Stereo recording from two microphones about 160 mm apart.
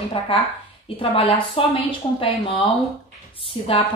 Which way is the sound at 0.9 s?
35° left (ahead or behind).